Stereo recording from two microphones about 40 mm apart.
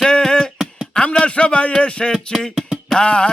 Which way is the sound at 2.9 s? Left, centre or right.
Left.